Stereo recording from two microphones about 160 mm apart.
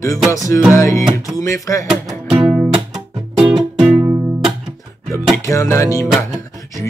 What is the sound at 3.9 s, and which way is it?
Music, 15° right (ahead or behind).